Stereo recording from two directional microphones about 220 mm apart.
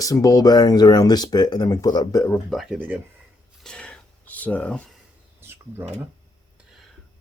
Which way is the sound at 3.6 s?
5° left (ahead or behind).